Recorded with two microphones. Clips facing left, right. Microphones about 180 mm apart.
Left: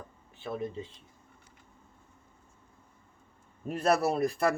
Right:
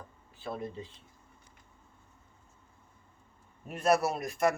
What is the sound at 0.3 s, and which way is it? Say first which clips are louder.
Speech: left 3 dB; 20° left (ahead or behind).